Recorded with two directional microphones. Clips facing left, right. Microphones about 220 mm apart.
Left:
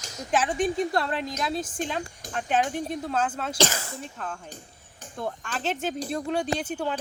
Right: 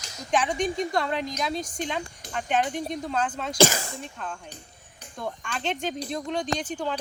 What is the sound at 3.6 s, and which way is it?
Speech, 10° right (ahead or behind).